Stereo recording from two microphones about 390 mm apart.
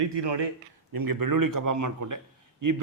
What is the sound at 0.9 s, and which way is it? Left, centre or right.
A man's voice, right.